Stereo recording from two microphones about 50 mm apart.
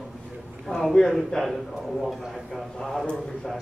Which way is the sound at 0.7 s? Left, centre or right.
Centre.